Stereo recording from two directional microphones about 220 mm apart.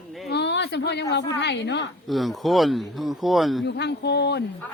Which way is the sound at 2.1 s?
Centre (ahead or behind).